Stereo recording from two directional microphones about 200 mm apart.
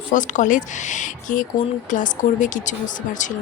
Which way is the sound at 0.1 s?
40° left (ahead or behind).